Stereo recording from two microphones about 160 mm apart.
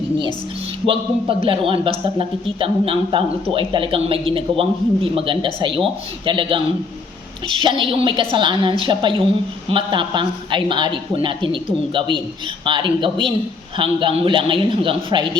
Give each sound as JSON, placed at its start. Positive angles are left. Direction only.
{"t": 0.9, "sound": "a man's voice", "side_deg": -35}